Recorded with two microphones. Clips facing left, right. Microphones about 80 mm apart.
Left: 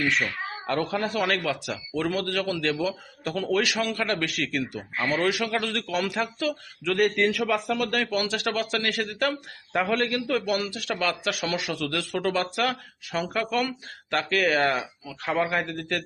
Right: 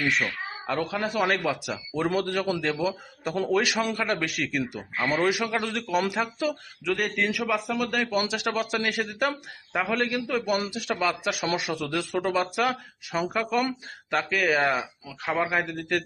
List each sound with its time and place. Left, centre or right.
0.7 s a man's voice: centre
1.2 s a man's voice: right
3.9 s a man's voice: centre
6.8 s a man's voice: centre
9.7 s a man's voice: centre
10.2 s a man's voice: centre
10.9 s a man's voice: centre
11.2 s a man's voice: centre